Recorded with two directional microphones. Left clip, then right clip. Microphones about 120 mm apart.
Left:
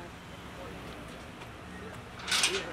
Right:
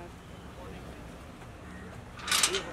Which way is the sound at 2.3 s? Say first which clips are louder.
Right 1 dB; 30° right (ahead or behind).